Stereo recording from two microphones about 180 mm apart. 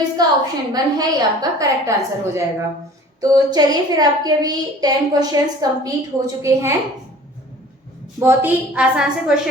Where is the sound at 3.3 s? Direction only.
20° right (ahead or behind).